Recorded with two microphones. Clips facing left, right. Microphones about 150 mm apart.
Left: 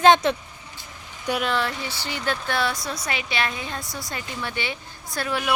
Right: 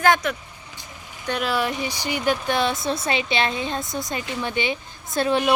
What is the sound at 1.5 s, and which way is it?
Speech, 15° right (ahead or behind).